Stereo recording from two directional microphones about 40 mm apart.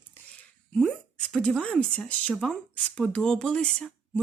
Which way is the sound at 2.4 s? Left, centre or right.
Centre.